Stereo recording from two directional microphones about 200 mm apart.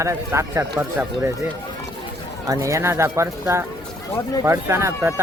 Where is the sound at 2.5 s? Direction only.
15° right (ahead or behind).